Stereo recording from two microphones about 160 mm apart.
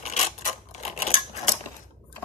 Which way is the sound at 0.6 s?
45° left (ahead or behind).